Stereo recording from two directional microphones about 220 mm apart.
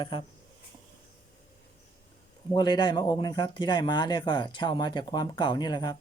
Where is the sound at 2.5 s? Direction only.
20° left (ahead or behind).